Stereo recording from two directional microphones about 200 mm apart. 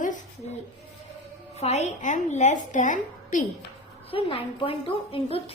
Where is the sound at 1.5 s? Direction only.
35° left (ahead or behind).